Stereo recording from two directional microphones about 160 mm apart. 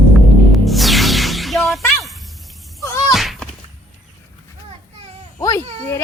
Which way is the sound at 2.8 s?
20° left (ahead or behind).